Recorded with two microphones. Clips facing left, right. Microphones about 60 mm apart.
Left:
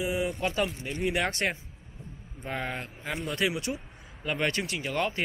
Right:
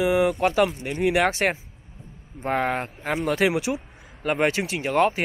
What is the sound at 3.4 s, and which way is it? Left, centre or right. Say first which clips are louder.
Speech: right 5 dB; right.